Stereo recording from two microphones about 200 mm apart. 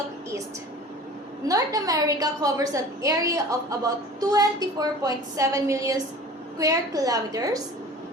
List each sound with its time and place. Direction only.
1.5 s a woman's voice: 15° right (ahead or behind)